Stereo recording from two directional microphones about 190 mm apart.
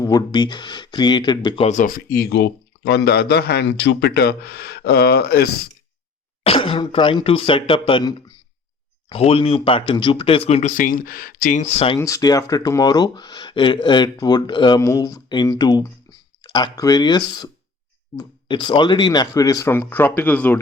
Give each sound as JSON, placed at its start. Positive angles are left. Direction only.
{"t": 0.0, "sound": "speech", "side_deg": 20}
{"t": 6.4, "sound": "speech", "side_deg": 30}
{"t": 11.9, "sound": "speech", "side_deg": 15}